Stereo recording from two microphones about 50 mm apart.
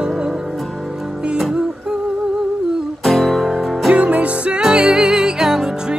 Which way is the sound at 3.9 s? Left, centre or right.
Right.